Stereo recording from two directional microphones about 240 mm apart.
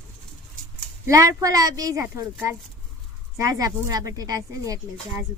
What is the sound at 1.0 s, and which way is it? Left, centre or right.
Speech, centre.